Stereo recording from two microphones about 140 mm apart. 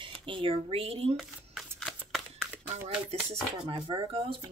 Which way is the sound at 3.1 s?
50° right (ahead or behind).